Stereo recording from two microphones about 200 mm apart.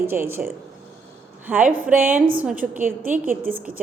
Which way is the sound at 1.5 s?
10° right (ahead or behind).